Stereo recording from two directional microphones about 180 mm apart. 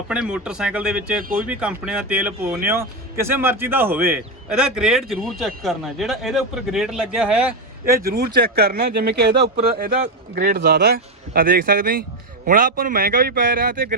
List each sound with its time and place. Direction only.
0.1 s speech: 5° right (ahead or behind)
1.2 s a man's voice: 50° right (ahead or behind)
1.5 s speech: 5° right (ahead or behind)
8.0 s a man's voice: 60° right (ahead or behind)